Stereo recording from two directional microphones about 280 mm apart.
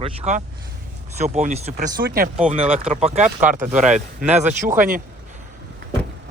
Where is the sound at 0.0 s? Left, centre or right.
Right.